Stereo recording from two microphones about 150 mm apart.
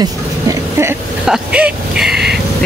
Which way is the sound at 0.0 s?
20° right (ahead or behind).